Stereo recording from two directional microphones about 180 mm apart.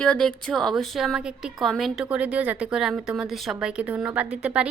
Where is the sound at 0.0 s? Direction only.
5° left (ahead or behind).